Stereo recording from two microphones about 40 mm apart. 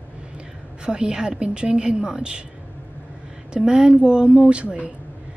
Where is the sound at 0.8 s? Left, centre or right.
Centre.